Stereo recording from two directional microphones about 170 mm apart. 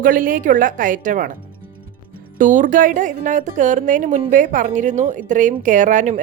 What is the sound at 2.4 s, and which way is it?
Speech, 50° right (ahead or behind).